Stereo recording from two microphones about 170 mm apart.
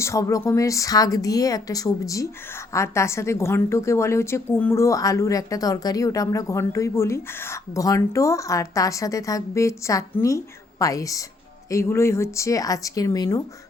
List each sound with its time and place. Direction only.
0.0 s a woman's voice: 15° left (ahead or behind)